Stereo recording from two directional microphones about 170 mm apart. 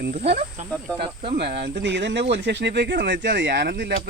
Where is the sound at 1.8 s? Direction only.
90° right.